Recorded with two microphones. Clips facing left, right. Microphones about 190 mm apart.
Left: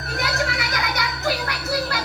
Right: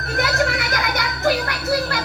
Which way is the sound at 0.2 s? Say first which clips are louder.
Right 5 dB; 50° right (ahead or behind).